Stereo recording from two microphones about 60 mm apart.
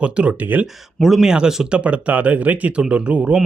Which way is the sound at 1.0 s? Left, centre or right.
Centre.